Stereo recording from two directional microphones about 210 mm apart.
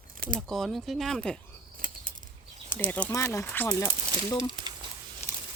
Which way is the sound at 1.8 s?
40° right (ahead or behind).